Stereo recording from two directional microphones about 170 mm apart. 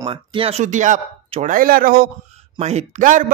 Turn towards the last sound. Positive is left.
turn(degrees=-50)  # may be behind; listen again after turning